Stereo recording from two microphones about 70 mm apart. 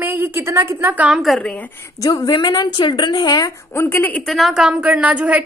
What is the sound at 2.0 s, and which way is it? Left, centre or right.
A woman's voice, left.